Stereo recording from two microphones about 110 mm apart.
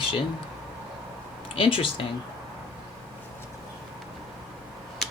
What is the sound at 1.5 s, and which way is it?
Speech, 55° left (ahead or behind).